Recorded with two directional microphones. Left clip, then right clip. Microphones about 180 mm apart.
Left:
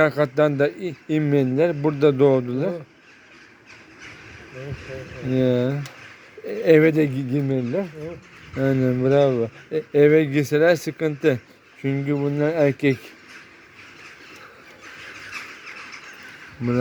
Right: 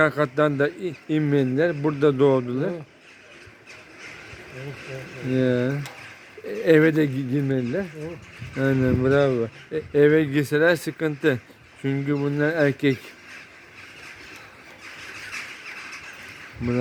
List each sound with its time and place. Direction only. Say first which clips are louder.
0.0 s speech: left 2 dB; 15° left (ahead or behind)
5.3 s speech: left 2 dB; 15° left (ahead or behind)